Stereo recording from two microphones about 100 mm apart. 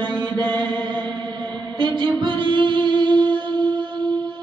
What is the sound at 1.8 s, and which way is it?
Music, 55° right (ahead or behind).